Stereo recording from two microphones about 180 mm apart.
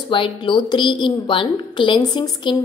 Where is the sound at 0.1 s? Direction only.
25° left (ahead or behind).